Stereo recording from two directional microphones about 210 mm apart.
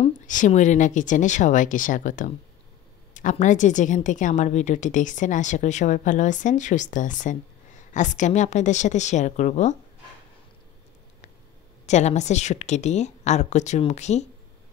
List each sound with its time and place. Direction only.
0.0 s a woman's voice: 35° left (ahead or behind)
11.8 s a woman's voice: 35° left (ahead or behind)